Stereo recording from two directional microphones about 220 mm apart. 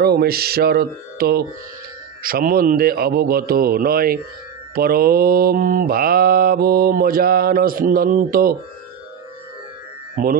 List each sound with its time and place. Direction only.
0.0 s mantra: 45° right (ahead or behind)
10.2 s speech: 40° right (ahead or behind)